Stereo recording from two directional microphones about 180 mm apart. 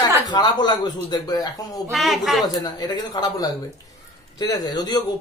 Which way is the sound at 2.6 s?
20° left (ahead or behind).